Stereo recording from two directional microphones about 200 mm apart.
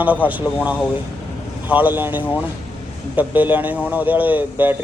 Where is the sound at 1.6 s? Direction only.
10° right (ahead or behind).